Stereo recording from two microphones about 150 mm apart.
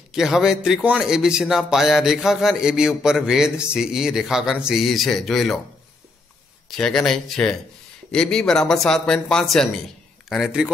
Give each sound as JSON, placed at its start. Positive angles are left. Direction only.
{"t": 0.1, "sound": "a man's voice", "side_deg": -5}
{"t": 6.8, "sound": "a man's voice", "side_deg": 5}